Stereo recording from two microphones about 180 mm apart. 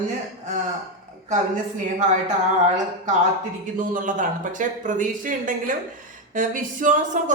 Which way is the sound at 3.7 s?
50° right (ahead or behind).